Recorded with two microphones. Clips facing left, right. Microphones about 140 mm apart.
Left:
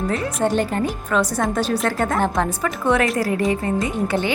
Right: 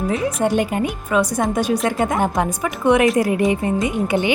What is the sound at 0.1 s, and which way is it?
A woman's voice, 10° right (ahead or behind).